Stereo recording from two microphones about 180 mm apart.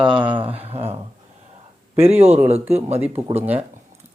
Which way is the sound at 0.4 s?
35° right (ahead or behind).